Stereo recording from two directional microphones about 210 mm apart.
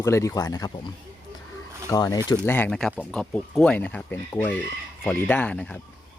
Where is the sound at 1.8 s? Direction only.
15° left (ahead or behind).